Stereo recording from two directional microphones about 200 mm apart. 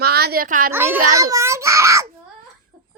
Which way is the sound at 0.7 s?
10° right (ahead or behind).